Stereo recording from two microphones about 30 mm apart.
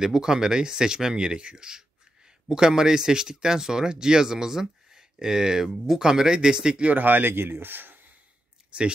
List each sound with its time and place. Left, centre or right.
0.0 s speech: centre
6.9 s speech: right
8.7 s speech: right